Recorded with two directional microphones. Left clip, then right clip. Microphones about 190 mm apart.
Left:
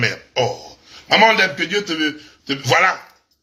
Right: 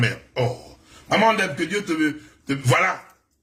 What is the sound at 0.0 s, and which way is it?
Throat clearing, 15° right (ahead or behind).